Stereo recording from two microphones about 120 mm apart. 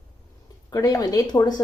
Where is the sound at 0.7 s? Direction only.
30° left (ahead or behind).